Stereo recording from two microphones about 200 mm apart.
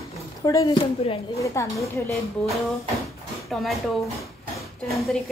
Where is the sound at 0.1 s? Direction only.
15° left (ahead or behind).